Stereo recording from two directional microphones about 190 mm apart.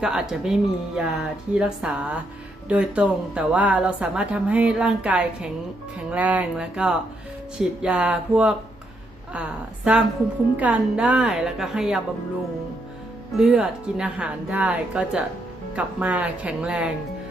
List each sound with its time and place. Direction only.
0.0 s a woman's voice: 5° right (ahead or behind)
13.3 s a woman's voice: 5° right (ahead or behind)